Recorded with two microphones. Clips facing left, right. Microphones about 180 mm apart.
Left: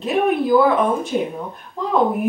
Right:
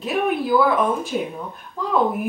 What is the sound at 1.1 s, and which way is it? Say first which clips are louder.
Speech: left 3 dB; centre (ahead or behind).